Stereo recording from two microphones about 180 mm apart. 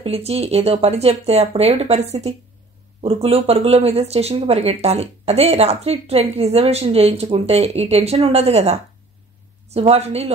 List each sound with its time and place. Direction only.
0.0 s speech: 35° right (ahead or behind)